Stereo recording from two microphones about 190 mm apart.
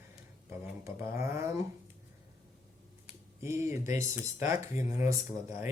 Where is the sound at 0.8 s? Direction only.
15° right (ahead or behind).